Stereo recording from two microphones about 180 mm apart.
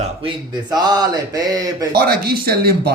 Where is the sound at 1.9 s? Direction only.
60° right (ahead or behind).